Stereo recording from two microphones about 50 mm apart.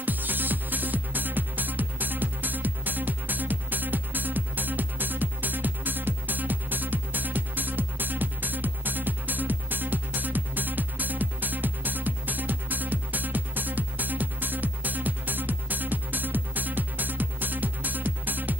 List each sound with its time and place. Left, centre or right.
0.0 s music: right